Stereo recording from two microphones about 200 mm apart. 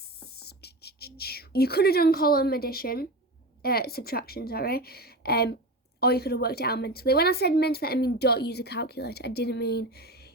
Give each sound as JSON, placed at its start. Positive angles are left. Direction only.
{"t": 0.4, "sound": "a woman's voice", "side_deg": 55}